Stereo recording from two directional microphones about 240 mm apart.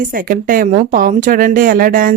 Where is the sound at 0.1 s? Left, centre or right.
Right.